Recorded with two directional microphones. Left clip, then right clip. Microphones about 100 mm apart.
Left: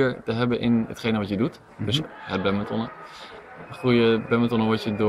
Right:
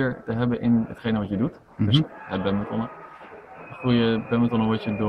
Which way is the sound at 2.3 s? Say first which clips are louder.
Left 5 dB; 15° left (ahead or behind).